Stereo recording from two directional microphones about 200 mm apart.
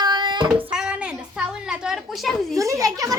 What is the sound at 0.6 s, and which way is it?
A woman's voice, 5° right (ahead or behind).